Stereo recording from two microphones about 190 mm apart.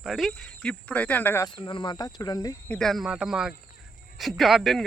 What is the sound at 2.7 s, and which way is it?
Speech, centre (ahead or behind).